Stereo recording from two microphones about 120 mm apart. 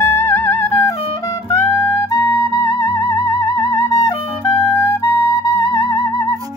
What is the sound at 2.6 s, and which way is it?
Music, 45° left (ahead or behind).